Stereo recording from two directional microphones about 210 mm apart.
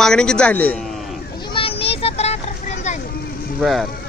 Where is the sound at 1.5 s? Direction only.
25° left (ahead or behind).